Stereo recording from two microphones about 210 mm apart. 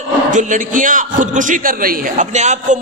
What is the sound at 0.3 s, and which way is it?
A man's voice, 35° right (ahead or behind).